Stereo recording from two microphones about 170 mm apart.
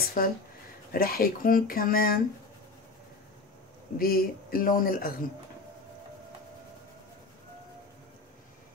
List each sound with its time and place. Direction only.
0.2 s speech: 55° left (ahead or behind)
4.0 s speech: 60° left (ahead or behind)